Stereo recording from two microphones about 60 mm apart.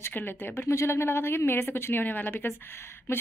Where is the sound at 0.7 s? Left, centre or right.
Left.